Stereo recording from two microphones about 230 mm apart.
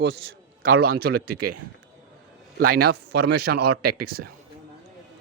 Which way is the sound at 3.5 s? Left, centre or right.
Right.